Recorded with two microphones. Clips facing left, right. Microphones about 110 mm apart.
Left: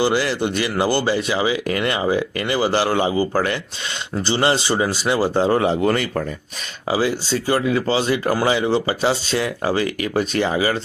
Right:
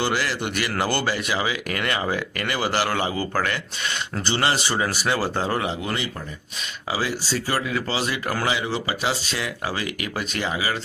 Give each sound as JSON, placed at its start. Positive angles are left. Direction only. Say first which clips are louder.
{"t": 0.0, "sound": "speech", "louder": "left 6 dB", "side_deg": 20}
{"t": 6.9, "sound": "speech", "louder": "left 6 dB", "side_deg": 25}